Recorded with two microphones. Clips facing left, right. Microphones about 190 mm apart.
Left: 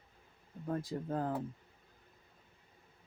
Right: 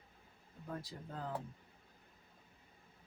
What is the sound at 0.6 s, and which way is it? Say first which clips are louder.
Speech: left 9 dB; 50° left (ahead or behind).